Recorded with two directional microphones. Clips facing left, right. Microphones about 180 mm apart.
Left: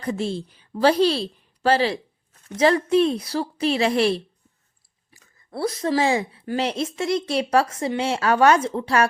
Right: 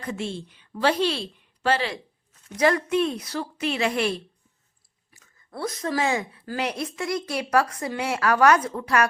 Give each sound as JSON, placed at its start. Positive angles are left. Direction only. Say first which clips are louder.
{"t": 0.0, "sound": "a woman's voice", "louder": "left 5 dB", "side_deg": 35}